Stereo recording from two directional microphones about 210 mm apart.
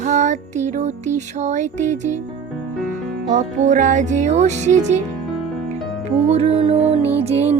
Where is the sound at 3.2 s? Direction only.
35° right (ahead or behind).